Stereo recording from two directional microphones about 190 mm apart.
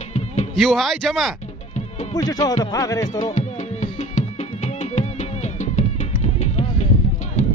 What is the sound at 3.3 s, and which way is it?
Music, 35° left (ahead or behind).